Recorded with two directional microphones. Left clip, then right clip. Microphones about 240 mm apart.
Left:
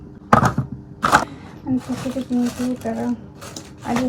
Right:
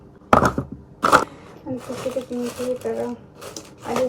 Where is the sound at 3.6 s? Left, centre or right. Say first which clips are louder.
Left 2 dB; left.